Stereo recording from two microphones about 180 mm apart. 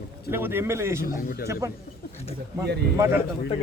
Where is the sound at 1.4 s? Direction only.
15° right (ahead or behind).